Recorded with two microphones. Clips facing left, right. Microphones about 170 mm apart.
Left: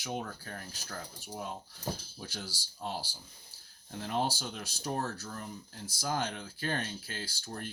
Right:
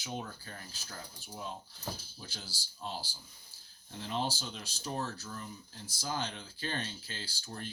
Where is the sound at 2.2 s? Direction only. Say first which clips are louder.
Left 5 dB; 60° left (ahead or behind).